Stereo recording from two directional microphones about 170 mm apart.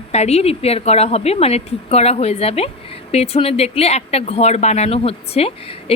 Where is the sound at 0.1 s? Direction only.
40° left (ahead or behind).